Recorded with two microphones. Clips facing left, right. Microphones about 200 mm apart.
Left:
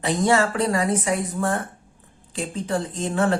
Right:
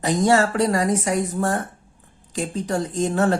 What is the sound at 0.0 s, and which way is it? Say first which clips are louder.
A woman's voice: right 2 dB; 40° right (ahead or behind).